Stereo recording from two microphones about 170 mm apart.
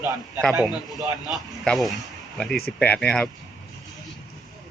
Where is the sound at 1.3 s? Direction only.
Centre (ahead or behind).